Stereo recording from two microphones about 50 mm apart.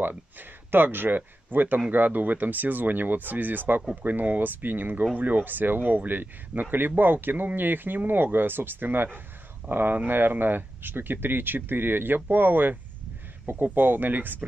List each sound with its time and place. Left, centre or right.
0.0 s speech: right